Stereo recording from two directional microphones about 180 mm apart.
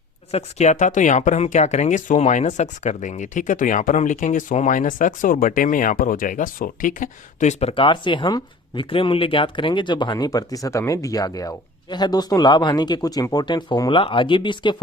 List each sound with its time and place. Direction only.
0.3 s speech: 40° left (ahead or behind)